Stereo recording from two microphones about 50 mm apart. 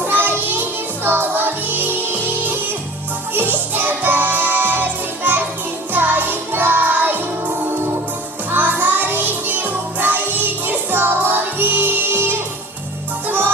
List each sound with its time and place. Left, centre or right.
0.0 s music: right